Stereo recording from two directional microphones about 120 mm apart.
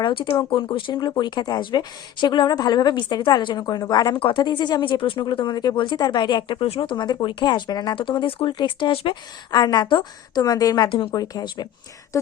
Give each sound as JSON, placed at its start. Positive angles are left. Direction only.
{"t": 0.0, "sound": "speech", "side_deg": 50}
{"t": 10.8, "sound": "speech", "side_deg": 45}